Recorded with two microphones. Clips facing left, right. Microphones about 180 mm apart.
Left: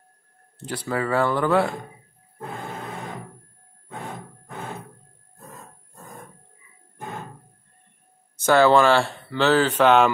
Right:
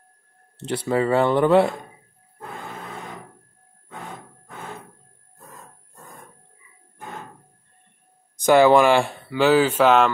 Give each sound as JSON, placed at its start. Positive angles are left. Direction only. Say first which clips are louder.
{"t": 0.6, "sound": "speech", "louder": "right 5 dB", "side_deg": -25}
{"t": 8.4, "sound": "speech", "louder": "right 2 dB", "side_deg": -15}